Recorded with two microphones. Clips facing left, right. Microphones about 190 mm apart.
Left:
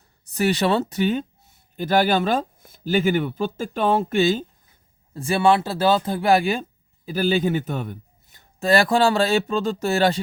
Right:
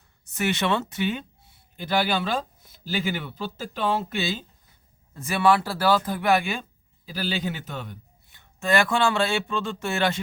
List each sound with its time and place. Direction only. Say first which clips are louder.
0.3 s speech: left 5 dB; 35° left (ahead or behind)
5.1 s speech: left 3 dB; 30° left (ahead or behind)